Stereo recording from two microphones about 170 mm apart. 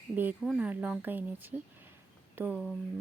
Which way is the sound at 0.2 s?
10° right (ahead or behind).